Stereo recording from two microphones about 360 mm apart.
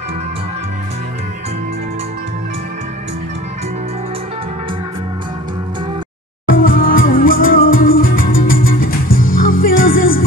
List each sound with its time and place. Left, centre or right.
6.4 s music: left